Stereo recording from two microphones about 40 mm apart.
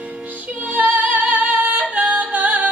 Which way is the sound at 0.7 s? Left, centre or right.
Right.